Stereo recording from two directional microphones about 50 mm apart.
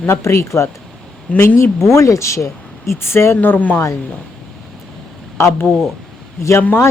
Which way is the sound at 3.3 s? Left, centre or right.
Left.